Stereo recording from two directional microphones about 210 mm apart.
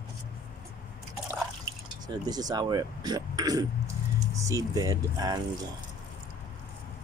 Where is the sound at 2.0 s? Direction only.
20° right (ahead or behind).